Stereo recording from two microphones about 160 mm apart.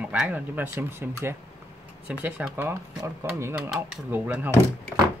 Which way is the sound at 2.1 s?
10° right (ahead or behind).